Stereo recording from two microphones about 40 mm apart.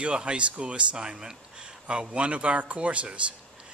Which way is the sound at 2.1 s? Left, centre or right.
Right.